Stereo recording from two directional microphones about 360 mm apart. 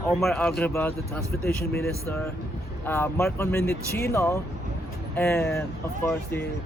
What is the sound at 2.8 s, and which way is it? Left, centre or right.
Speech, centre.